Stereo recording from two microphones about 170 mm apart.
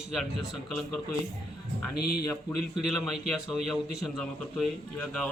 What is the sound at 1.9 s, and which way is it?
Speech, 70° left (ahead or behind).